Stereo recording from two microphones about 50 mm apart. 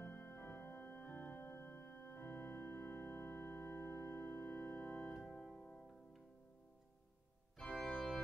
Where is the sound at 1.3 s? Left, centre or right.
Left.